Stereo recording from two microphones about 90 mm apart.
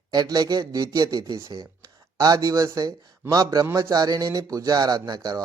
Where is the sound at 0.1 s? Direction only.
50° right (ahead or behind).